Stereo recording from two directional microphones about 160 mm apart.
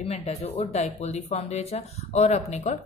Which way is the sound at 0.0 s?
40° left (ahead or behind).